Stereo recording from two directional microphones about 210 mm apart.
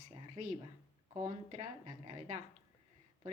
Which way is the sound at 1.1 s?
20° right (ahead or behind).